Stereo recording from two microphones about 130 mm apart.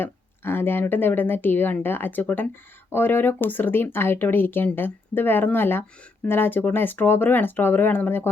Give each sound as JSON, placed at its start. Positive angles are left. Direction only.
{"t": 0.0, "sound": "speech", "side_deg": 15}